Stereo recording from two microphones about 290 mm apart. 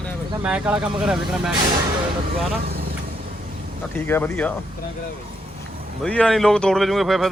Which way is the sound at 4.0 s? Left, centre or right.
Centre.